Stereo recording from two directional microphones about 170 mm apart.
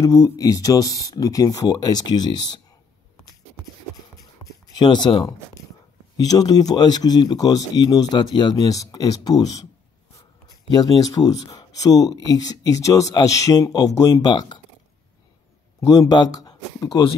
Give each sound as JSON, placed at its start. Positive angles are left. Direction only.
{"t": 0.0, "sound": "speech", "side_deg": 20}
{"t": 4.7, "sound": "speech", "side_deg": 25}
{"t": 10.7, "sound": "speech", "side_deg": 25}
{"t": 15.8, "sound": "speech", "side_deg": 20}